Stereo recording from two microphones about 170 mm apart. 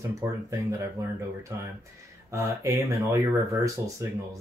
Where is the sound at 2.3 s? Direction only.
20° right (ahead or behind).